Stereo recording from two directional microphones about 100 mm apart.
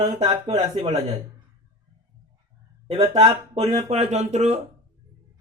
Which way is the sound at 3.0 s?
75° right (ahead or behind).